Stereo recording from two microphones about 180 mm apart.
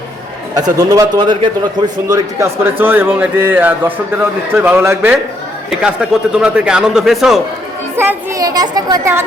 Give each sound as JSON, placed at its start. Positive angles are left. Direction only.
{"t": 0.5, "sound": "a man's voice", "side_deg": -20}
{"t": 7.9, "sound": "speech", "side_deg": -15}